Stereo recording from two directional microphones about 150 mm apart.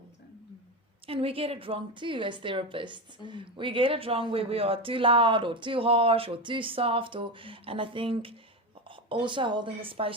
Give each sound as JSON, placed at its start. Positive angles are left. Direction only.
{"t": 1.0, "sound": "speech", "side_deg": -40}